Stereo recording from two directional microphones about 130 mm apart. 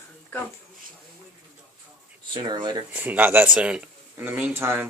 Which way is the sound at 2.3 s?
35° right (ahead or behind).